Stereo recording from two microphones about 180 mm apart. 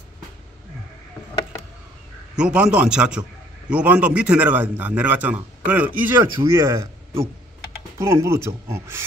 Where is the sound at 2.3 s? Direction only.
5° right (ahead or behind).